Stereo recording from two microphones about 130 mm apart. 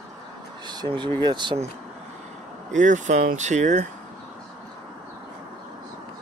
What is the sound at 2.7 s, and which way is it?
Speech, 70° right (ahead or behind).